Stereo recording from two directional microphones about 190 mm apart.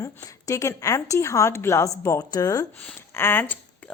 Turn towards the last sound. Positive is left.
turn(degrees=10)  # may be behind; listen again after turning